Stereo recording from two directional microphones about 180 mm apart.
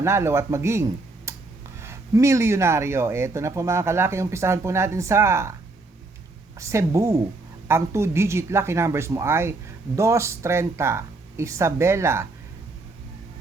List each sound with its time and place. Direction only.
0.0 s speech: 15° right (ahead or behind)
6.6 s speech: 15° right (ahead or behind)